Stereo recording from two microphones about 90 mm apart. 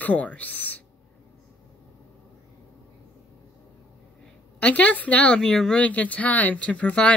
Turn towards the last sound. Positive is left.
turn(degrees=15)  # may be behind; listen again after turning